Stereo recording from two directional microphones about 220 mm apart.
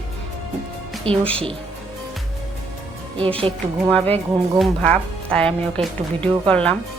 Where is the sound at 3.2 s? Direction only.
25° right (ahead or behind).